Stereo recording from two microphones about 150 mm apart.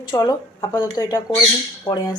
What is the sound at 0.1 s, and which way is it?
Speech, 25° left (ahead or behind).